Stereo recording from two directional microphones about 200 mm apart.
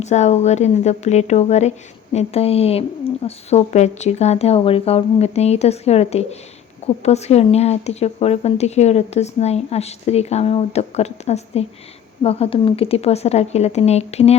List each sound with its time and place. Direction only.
0.0 s speech: 35° left (ahead or behind)